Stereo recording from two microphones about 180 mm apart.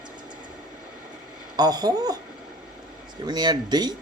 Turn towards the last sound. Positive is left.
turn(degrees=-20)  # may be behind; listen again after turning